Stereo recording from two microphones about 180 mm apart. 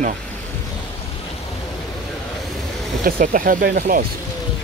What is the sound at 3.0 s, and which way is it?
Speech, 50° right (ahead or behind).